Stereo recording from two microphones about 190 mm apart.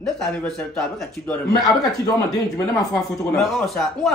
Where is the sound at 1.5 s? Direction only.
20° left (ahead or behind).